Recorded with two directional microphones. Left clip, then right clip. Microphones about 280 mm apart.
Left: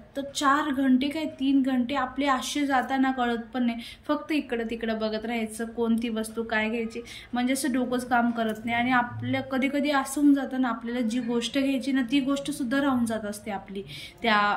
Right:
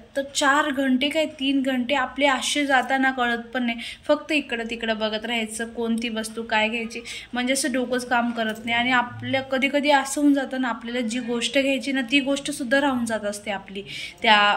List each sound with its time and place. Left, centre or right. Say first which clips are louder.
0.1 s a woman's voice: right 4 dB; centre